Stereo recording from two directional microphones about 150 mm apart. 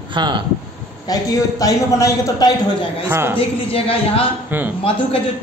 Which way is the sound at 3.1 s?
15° right (ahead or behind).